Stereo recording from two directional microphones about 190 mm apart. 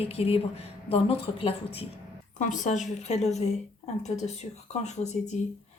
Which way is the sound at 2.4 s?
40° left (ahead or behind).